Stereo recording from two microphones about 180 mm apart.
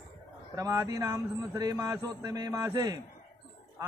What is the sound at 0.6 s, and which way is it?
A man's voice, 20° right (ahead or behind).